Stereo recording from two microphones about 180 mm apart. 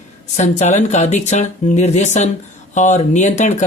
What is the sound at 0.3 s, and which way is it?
Speech, 40° left (ahead or behind).